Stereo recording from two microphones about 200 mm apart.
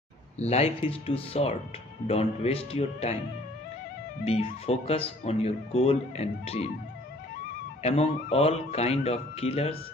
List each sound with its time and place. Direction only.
0.4 s speech: 30° left (ahead or behind)
4.2 s speech: 30° left (ahead or behind)
7.8 s speech: 30° left (ahead or behind)